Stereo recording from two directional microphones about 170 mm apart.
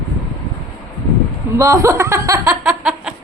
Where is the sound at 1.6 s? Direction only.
20° right (ahead or behind).